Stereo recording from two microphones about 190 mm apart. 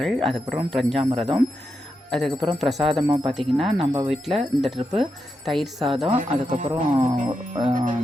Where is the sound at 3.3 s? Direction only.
Centre (ahead or behind).